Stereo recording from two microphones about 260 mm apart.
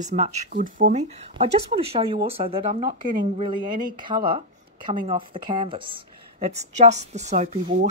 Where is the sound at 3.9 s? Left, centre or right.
Centre.